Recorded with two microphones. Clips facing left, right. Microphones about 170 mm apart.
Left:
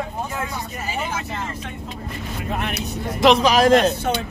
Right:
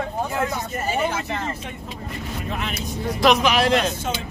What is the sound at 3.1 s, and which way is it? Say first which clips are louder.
Speech: left 3 dB; 30° left (ahead or behind).